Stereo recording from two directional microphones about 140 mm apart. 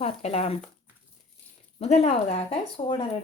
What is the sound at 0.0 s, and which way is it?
Speech, 45° left (ahead or behind).